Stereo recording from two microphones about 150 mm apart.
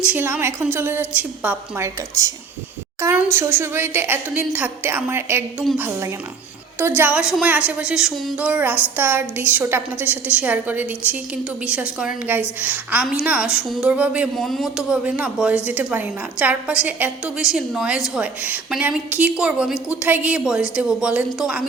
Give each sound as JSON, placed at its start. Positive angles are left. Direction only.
{"t": 0.0, "sound": "a woman's voice", "side_deg": -10}